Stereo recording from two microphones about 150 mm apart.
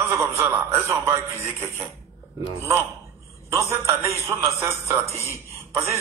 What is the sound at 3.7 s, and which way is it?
A man's voice, 20° right (ahead or behind).